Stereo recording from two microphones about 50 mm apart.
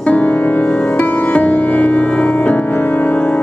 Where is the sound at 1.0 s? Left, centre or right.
Left.